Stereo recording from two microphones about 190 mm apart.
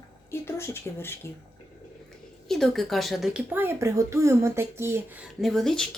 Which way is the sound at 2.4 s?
Centre (ahead or behind).